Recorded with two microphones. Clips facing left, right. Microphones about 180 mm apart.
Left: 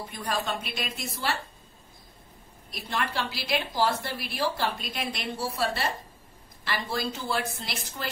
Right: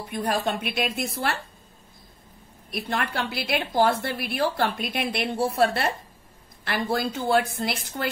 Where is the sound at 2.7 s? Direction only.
55° right (ahead or behind).